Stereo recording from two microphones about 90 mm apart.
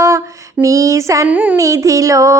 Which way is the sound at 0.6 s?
35° right (ahead or behind).